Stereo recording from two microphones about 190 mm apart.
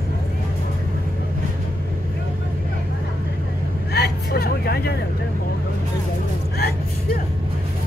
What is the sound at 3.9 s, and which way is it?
Vehicle, 55° left (ahead or behind).